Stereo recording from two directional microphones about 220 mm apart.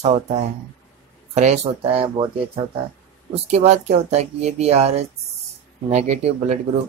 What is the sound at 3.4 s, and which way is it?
Speech, 30° right (ahead or behind).